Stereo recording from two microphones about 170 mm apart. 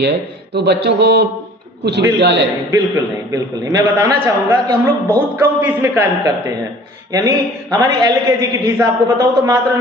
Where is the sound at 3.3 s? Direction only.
15° right (ahead or behind).